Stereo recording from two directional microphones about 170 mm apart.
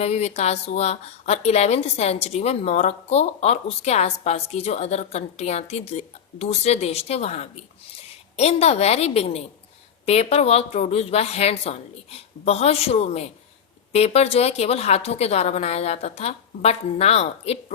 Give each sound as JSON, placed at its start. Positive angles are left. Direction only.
{"t": 0.0, "sound": "a woman's voice", "side_deg": 40}